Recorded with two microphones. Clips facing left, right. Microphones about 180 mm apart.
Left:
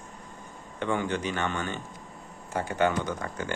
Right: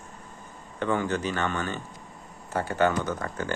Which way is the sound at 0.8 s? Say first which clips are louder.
Right 2 dB; 20° left (ahead or behind).